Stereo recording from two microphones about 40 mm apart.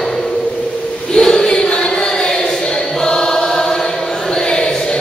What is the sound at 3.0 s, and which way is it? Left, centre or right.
Music, centre.